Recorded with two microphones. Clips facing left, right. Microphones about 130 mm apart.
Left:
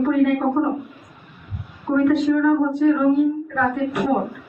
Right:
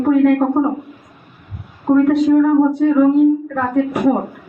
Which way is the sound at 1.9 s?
45° right (ahead or behind).